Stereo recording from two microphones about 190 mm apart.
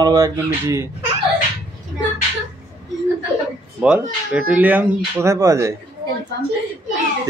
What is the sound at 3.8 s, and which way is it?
Speech, 5° right (ahead or behind).